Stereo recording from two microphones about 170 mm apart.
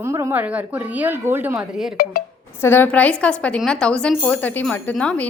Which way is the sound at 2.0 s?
60° left (ahead or behind).